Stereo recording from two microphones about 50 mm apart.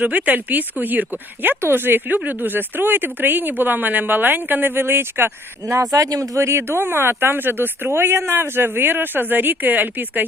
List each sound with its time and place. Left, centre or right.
0.0 s speech: right
6.3 s speech: right
6.6 s speech: right